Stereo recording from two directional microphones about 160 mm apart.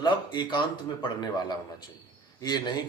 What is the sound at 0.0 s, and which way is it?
A man's voice, 30° left (ahead or behind).